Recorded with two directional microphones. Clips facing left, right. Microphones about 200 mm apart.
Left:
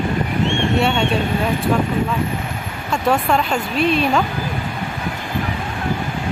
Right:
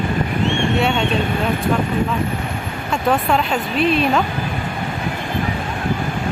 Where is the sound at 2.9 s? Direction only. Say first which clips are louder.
Even; centre (ahead or behind).